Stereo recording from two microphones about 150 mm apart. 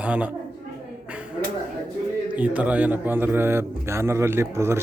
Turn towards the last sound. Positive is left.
turn(degrees=-15)  # may be behind; listen again after turning